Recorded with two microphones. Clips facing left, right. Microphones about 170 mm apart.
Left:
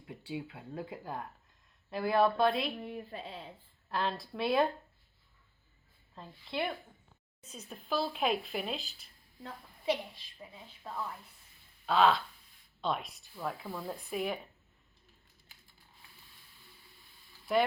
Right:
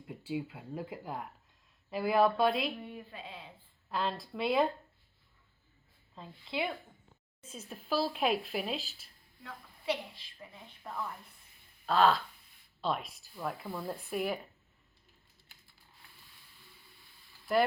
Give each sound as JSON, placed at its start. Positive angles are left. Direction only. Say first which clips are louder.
{"t": 0.0, "sound": "speech", "louder": "right 3 dB", "side_deg": 0}
{"t": 2.8, "sound": "a woman's voice", "louder": "left 4 dB", "side_deg": 40}
{"t": 3.8, "sound": "speech", "louder": "even", "side_deg": 0}
{"t": 6.1, "sound": "speech", "louder": "even", "side_deg": 0}
{"t": 9.8, "sound": "a woman's voice", "louder": "left 2 dB", "side_deg": 15}
{"t": 11.9, "sound": "speech", "louder": "even", "side_deg": 0}
{"t": 17.5, "sound": "speech", "louder": "right 1 dB", "side_deg": 0}